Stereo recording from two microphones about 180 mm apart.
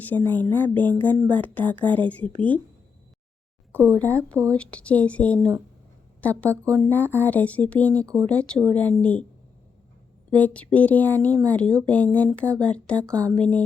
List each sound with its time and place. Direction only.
0.0 s speech: 10° left (ahead or behind)
3.7 s speech: 10° left (ahead or behind)
8.0 s speech: 20° right (ahead or behind)
8.3 s speech: 5° left (ahead or behind)
10.3 s speech: 10° left (ahead or behind)